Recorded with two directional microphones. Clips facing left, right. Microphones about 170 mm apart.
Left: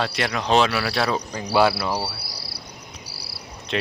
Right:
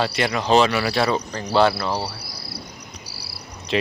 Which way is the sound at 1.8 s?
10° left (ahead or behind).